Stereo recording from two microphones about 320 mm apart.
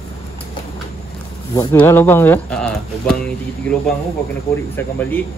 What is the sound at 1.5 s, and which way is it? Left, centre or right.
Speech, centre.